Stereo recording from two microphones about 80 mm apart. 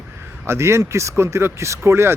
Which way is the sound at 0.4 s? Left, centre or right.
Right.